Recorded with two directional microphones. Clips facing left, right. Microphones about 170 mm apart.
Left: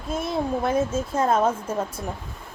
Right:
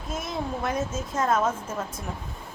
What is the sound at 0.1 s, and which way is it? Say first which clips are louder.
Speech: left 6 dB; 30° left (ahead or behind).